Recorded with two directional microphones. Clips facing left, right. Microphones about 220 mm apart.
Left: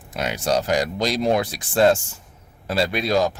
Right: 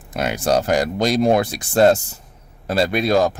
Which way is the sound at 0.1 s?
50° right (ahead or behind).